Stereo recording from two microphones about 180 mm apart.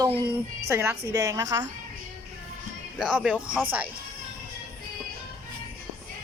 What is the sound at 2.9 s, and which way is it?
Speech, 5° right (ahead or behind).